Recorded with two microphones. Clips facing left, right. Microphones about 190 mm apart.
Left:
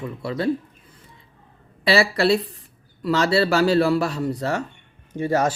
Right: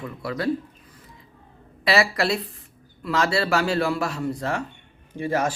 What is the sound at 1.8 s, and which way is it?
Speech, 30° left (ahead or behind).